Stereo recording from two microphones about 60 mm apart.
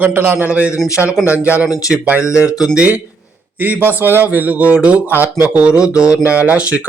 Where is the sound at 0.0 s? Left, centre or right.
Right.